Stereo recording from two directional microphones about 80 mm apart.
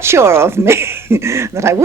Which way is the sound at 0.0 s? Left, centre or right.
Right.